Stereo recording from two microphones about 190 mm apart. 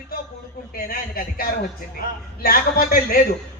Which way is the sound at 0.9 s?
50° left (ahead or behind).